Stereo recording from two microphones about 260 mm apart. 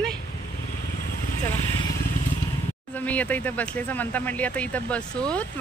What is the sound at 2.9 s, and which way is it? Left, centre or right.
Speech, centre.